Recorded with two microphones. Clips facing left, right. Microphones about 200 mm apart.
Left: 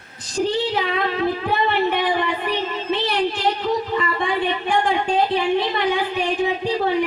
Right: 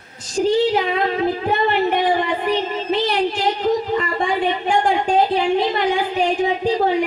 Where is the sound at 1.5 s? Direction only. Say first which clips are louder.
Right 3 dB; 45° right (ahead or behind).